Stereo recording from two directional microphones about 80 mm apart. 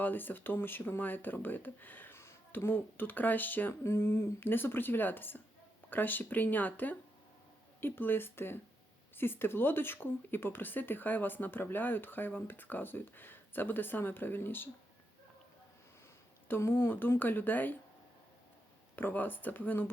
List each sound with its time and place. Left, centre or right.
0.0 s speech: left
16.5 s speech: left
18.9 s speech: left